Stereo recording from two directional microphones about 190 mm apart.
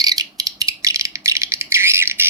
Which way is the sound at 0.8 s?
15° right (ahead or behind).